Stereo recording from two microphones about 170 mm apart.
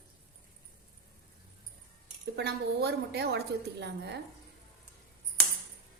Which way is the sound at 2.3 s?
75° right (ahead or behind).